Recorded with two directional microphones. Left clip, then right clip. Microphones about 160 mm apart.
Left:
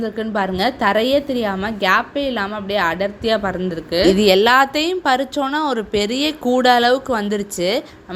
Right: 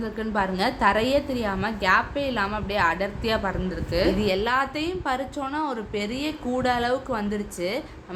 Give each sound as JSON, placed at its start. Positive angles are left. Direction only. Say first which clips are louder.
{"t": 0.0, "sound": "a woman's voice", "louder": "left 5 dB", "side_deg": 30}
{"t": 4.2, "sound": "a woman's voice", "louder": "left 11 dB", "side_deg": 50}